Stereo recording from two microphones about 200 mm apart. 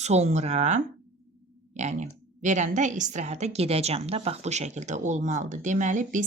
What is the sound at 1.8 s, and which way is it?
Speech, 35° right (ahead or behind).